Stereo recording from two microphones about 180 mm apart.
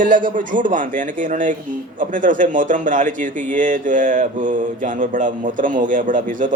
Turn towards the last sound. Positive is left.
turn(degrees=-45)  # may be behind; listen again after turning